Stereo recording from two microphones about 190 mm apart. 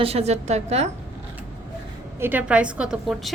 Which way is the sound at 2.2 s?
10° right (ahead or behind).